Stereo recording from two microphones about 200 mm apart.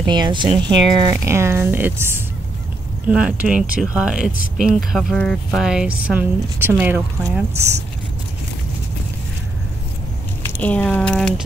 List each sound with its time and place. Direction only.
0.0 s speech: 20° right (ahead or behind)
10.6 s speech: 5° left (ahead or behind)